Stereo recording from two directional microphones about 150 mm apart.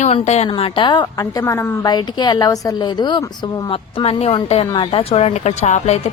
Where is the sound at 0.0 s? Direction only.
45° left (ahead or behind).